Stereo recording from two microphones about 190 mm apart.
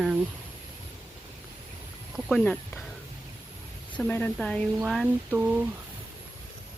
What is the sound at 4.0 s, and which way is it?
Speech, 10° left (ahead or behind).